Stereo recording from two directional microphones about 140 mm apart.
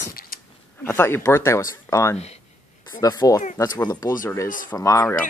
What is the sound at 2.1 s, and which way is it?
Speech, 50° left (ahead or behind).